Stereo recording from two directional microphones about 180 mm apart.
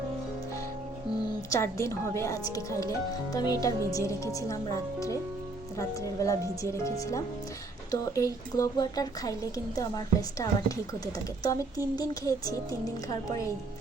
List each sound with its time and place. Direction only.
1.5 s a woman's voice: 15° left (ahead or behind)